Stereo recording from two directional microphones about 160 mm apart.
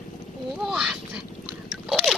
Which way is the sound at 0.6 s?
5° right (ahead or behind).